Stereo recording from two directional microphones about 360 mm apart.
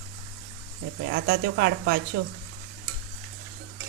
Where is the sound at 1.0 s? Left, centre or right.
Right.